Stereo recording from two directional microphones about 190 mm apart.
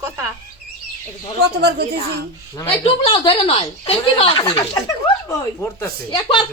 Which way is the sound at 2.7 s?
30° left (ahead or behind).